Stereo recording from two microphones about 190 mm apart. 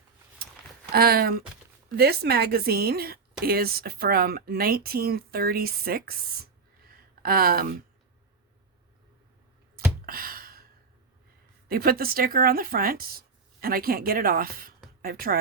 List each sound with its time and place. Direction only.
0.9 s a woman's voice: 55° right (ahead or behind)
9.7 s a sound: 50° right (ahead or behind)
11.7 s speech: 50° right (ahead or behind)